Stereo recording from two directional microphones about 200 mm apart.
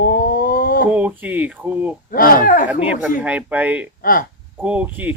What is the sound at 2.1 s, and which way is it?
Speech, 45° left (ahead or behind).